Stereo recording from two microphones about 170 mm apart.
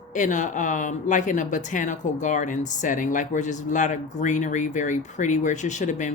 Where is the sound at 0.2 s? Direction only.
45° left (ahead or behind).